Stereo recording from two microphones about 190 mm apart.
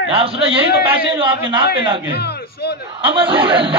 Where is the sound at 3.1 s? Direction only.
30° right (ahead or behind).